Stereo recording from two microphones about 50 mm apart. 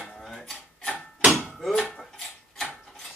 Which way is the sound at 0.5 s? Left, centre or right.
Left.